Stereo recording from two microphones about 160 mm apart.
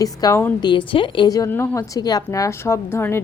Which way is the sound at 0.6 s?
30° left (ahead or behind).